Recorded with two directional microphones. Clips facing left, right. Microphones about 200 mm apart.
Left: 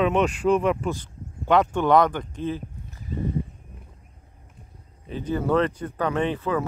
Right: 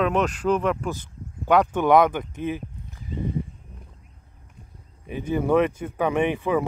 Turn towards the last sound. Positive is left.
turn(degrees=-15)  # may be behind; listen again after turning